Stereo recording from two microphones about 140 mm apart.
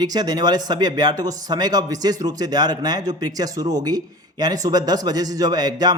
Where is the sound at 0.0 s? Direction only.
30° right (ahead or behind).